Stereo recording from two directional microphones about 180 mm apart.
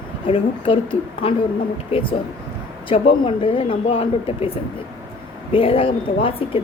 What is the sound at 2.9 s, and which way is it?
Speech, 30° left (ahead or behind).